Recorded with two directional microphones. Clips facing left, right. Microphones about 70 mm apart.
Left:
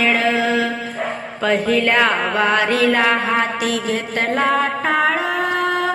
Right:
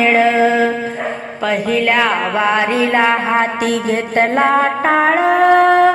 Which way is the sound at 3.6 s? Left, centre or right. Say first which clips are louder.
Right 4 dB; right.